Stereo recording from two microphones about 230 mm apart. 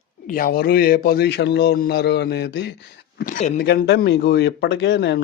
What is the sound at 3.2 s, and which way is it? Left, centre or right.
Speech, left.